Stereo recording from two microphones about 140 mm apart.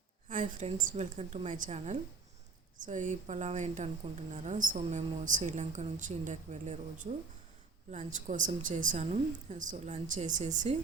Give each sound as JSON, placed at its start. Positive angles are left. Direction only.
{"t": 0.3, "sound": "a woman's voice", "side_deg": -65}